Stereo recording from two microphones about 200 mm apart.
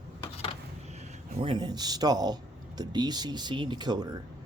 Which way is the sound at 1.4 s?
25° right (ahead or behind).